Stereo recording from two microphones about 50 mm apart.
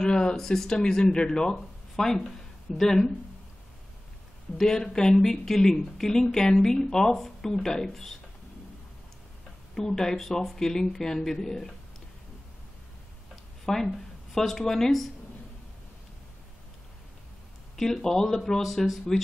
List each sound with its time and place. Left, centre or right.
0.0 s speech: centre
4.6 s speech: centre
9.8 s speech: centre
13.7 s speech: centre
18.0 s speech: centre